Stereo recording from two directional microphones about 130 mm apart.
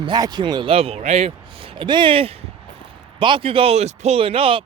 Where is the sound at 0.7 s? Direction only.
50° right (ahead or behind).